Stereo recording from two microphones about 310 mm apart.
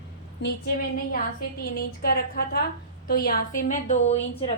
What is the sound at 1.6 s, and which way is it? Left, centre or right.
A woman's voice, left.